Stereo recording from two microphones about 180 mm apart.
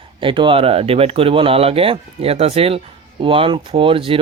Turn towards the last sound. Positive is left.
turn(degrees=-30)  # may be behind; listen again after turning